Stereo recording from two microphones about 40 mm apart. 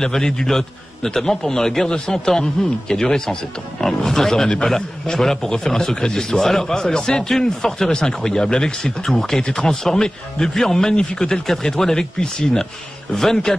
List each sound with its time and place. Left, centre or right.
0.0 s a man's voice: centre